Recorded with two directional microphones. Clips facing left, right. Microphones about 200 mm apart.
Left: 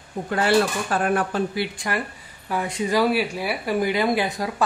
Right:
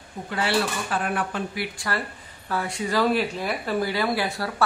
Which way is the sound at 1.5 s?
30° left (ahead or behind).